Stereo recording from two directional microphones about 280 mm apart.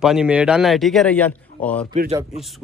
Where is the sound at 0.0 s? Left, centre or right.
Centre.